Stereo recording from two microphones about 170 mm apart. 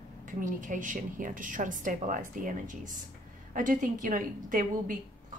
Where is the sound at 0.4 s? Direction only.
50° right (ahead or behind).